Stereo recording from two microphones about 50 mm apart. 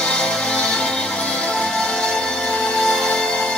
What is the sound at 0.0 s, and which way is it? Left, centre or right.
Music, centre.